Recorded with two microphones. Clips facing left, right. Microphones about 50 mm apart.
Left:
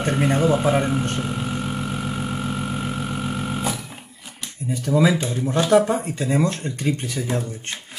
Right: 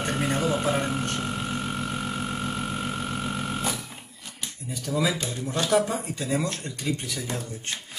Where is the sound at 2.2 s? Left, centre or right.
Centre.